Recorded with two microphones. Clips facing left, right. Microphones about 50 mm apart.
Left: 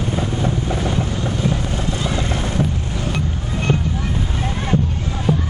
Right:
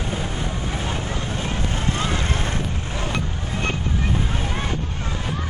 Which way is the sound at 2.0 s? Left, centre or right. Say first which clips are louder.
Left 2 dB; right.